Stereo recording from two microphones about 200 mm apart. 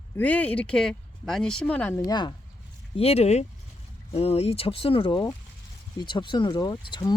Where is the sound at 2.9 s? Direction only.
30° left (ahead or behind).